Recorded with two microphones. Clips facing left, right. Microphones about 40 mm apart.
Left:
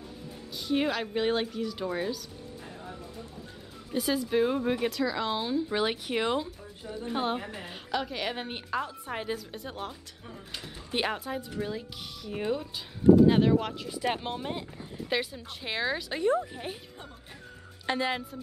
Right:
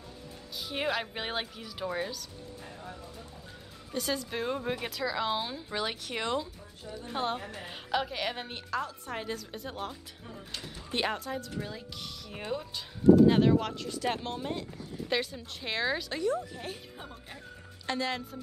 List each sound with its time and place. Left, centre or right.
0.6 s a woman's voice: centre
3.9 s a woman's voice: centre
5.7 s a woman's voice: centre
7.1 s a woman's voice: centre
7.6 s a woman's voice: centre
8.5 s a woman's voice: centre
15.0 s a woman's voice: centre
16.2 s speech: left
17.8 s speech: centre